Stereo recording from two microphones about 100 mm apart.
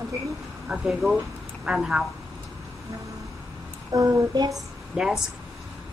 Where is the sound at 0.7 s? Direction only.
5° right (ahead or behind).